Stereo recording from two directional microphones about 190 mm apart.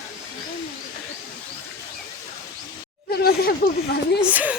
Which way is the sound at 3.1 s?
55° left (ahead or behind).